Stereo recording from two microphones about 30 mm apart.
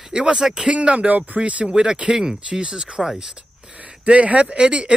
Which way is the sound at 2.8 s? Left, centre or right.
Centre.